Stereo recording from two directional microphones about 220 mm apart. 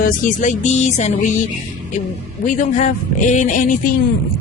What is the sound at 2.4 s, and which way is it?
Speech, 35° left (ahead or behind).